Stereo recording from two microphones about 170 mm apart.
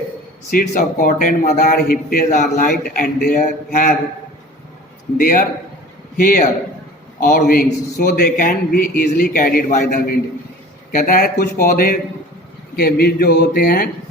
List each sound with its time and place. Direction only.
0.5 s a man's voice: 50° left (ahead or behind)
5.1 s a man's voice: 55° left (ahead or behind)